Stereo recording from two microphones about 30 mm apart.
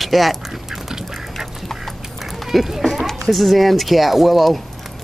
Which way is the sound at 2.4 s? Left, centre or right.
Centre.